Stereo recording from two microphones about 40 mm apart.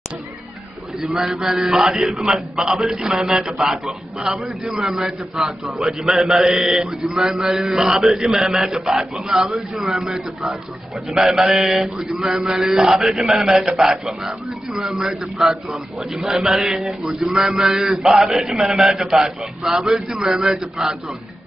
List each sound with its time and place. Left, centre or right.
1.0 s a man's voice: centre
4.7 s a man's voice: centre
9.3 s a man's voice: centre
9.9 s a man's voice: centre
12.4 s a man's voice: right
13.4 s a man's voice: centre
17.2 s a man's voice: right